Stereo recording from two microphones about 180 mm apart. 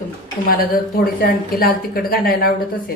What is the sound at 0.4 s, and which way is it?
A woman's voice, 55° left (ahead or behind).